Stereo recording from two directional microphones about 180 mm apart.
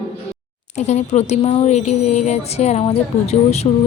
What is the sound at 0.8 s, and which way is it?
Speech, 40° left (ahead or behind).